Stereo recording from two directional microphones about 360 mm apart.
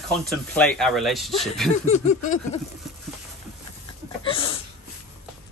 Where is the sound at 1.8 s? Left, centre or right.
Centre.